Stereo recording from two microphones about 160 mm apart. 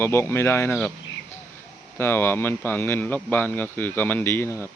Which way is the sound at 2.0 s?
15° left (ahead or behind).